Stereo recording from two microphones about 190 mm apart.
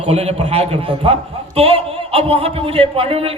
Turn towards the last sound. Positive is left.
turn(degrees=-30)  # may be behind; listen again after turning